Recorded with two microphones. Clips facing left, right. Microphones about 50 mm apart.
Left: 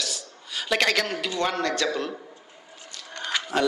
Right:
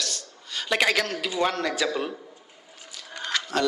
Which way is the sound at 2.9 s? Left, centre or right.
Centre.